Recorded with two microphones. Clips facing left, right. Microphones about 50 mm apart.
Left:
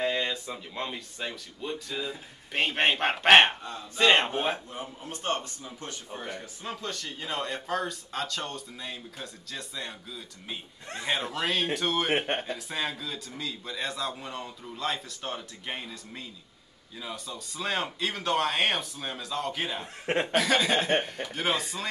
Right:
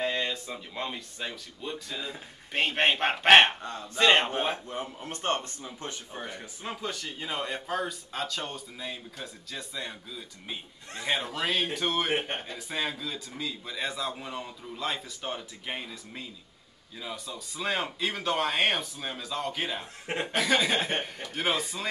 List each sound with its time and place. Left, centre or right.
0.0 s speech: centre
4.6 s speech: right
6.1 s a man's voice: centre
20.1 s speech: left
20.3 s speech: centre